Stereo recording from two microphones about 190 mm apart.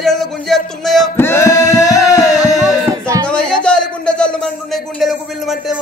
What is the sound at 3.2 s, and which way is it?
Music, 5° left (ahead or behind).